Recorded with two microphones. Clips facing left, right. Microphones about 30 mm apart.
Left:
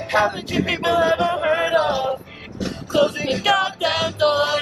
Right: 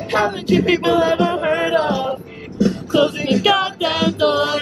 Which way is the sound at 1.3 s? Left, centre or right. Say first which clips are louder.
Right 1 dB; centre.